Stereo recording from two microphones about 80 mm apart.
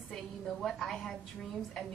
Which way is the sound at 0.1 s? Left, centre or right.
Centre.